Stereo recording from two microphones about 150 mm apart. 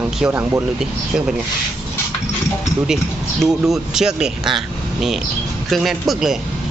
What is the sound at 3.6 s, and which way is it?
Speech, 5° right (ahead or behind).